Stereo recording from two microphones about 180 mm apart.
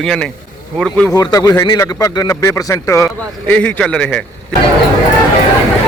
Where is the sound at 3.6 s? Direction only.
5° left (ahead or behind).